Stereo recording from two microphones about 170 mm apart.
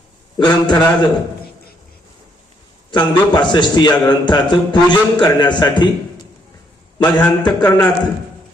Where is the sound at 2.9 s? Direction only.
25° left (ahead or behind).